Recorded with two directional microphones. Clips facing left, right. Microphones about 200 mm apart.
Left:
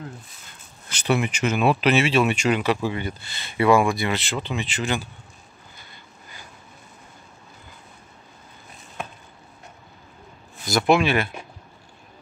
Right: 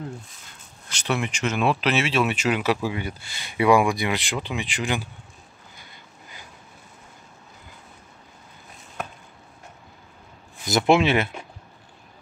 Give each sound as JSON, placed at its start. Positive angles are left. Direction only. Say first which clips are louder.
{"t": 0.8, "sound": "speech", "louder": "left 4 dB", "side_deg": 5}
{"t": 10.6, "sound": "speech", "louder": "even", "side_deg": -20}